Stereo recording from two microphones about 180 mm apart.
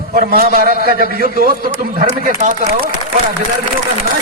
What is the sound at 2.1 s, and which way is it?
Speech, 40° right (ahead or behind).